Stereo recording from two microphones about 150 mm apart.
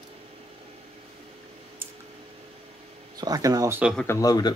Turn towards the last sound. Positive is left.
turn(degrees=25)  # may be behind; listen again after turning